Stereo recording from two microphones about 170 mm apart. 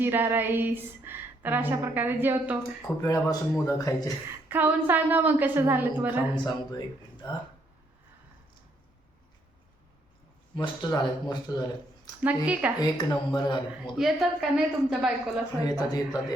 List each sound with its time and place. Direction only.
0.0 s a woman's voice: 10° right (ahead or behind)
2.8 s speech: 20° left (ahead or behind)
4.4 s a woman's voice: 10° right (ahead or behind)
6.3 s speech: 25° left (ahead or behind)
10.5 s speech: 30° left (ahead or behind)
12.2 s a woman's voice: 10° right (ahead or behind)
12.8 s speech: 25° left (ahead or behind)
13.9 s a woman's voice: centre (ahead or behind)
15.7 s speech: 25° left (ahead or behind)